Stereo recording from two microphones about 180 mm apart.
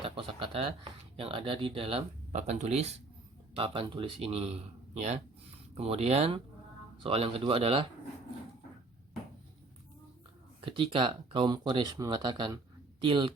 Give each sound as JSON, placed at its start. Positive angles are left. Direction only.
{"t": 0.0, "sound": "a sound", "side_deg": -30}
{"t": 1.1, "sound": "speech", "side_deg": -30}
{"t": 10.7, "sound": "speech", "side_deg": -30}